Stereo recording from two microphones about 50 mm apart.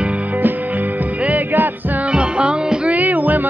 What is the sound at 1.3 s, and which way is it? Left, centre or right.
Music, right.